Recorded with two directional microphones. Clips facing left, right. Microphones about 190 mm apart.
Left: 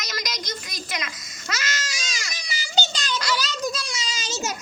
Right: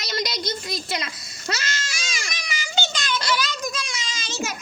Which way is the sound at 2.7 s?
40° left (ahead or behind).